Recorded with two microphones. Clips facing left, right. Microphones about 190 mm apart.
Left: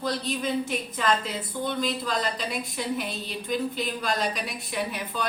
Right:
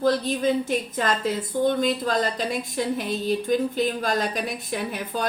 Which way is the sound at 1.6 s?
50° right (ahead or behind).